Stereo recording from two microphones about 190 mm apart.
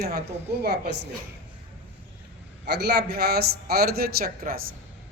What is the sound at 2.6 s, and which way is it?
A man's voice, 60° right (ahead or behind).